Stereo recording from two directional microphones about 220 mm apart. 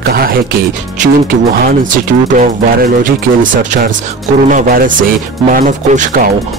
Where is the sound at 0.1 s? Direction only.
45° right (ahead or behind).